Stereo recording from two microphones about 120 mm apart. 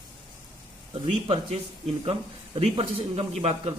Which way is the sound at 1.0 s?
50° right (ahead or behind).